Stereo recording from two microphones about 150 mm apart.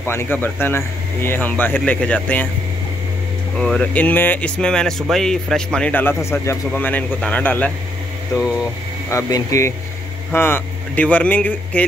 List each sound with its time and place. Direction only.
0.0 s a man's voice: 15° left (ahead or behind)
3.5 s a man's voice: 5° left (ahead or behind)
9.1 s a man's voice: 20° left (ahead or behind)